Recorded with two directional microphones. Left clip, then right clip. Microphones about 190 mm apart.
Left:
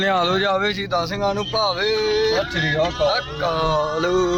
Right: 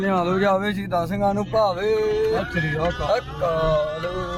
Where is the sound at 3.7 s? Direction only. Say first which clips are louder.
Left 3 dB; 40° left (ahead or behind).